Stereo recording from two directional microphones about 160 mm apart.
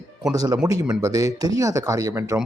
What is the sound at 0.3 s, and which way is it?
Speech, 25° right (ahead or behind).